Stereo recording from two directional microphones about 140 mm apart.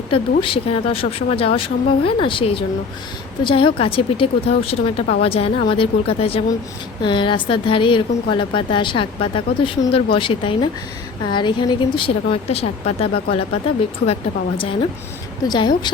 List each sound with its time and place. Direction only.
0.1 s a woman's voice: 40° left (ahead or behind)
14.6 s a woman's voice: 40° left (ahead or behind)